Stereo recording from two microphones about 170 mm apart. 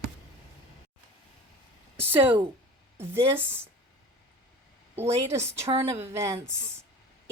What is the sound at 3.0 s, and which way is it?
Speech, 15° right (ahead or behind).